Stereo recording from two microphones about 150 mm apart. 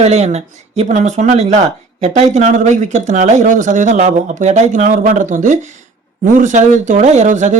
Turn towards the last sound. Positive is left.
turn(degrees=-55)  # may be behind; listen again after turning